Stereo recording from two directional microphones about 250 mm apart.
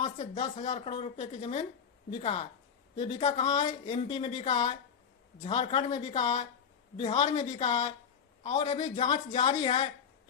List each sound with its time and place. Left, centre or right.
0.0 s speech: left